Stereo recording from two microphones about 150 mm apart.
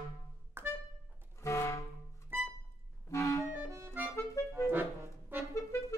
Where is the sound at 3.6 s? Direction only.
15° right (ahead or behind).